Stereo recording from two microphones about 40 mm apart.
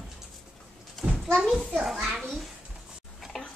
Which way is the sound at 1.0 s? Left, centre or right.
Centre.